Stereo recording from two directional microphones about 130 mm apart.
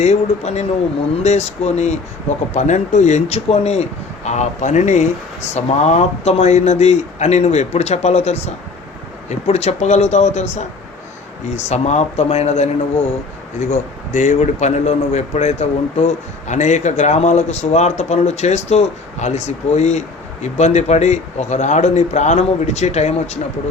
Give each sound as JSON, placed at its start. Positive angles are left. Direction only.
{"t": 0.0, "sound": "a man's voice", "side_deg": 60}
{"t": 13.6, "sound": "a man's voice", "side_deg": 70}